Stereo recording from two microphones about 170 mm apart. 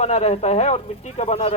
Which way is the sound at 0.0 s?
40° left (ahead or behind).